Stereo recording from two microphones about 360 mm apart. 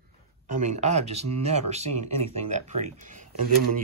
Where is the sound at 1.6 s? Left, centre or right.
Centre.